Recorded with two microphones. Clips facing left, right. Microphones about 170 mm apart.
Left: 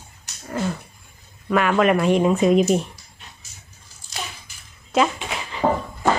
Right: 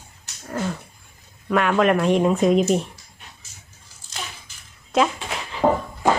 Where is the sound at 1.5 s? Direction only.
Centre (ahead or behind).